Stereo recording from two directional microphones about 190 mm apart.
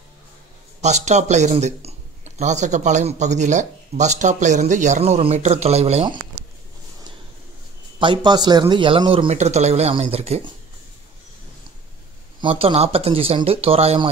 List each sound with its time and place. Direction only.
0.8 s speech: 35° right (ahead or behind)
8.0 s a man's voice: 25° right (ahead or behind)
12.4 s speech: 30° right (ahead or behind)